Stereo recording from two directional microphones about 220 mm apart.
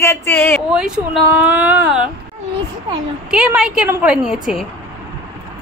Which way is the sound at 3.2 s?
5° right (ahead or behind).